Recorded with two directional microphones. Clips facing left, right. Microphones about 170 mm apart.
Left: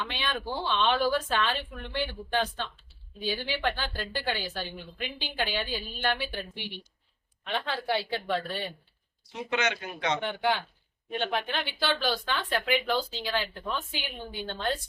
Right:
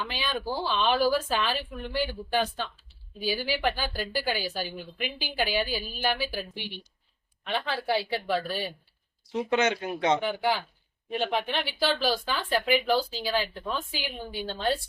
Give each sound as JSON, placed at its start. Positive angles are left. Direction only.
{"t": 0.0, "sound": "a woman's voice", "side_deg": -5}
{"t": 9.3, "sound": "speech", "side_deg": -30}
{"t": 10.2, "sound": "a woman's voice", "side_deg": -5}